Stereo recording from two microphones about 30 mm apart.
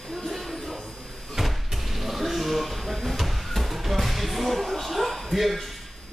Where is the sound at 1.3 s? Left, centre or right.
Centre.